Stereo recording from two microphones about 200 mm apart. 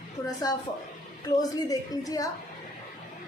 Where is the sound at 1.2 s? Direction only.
20° left (ahead or behind).